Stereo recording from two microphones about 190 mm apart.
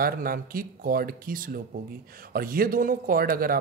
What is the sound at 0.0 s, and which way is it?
Speech, 50° right (ahead or behind).